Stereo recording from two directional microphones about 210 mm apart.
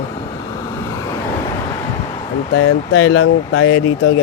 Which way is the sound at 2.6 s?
75° left (ahead or behind).